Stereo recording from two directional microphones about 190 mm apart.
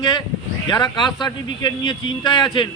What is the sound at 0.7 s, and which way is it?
A man's voice, 20° left (ahead or behind).